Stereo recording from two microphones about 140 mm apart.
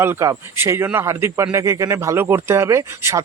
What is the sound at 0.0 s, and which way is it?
A man's voice, 20° right (ahead or behind).